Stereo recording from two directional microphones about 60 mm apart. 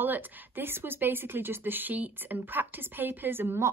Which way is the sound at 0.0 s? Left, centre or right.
Right.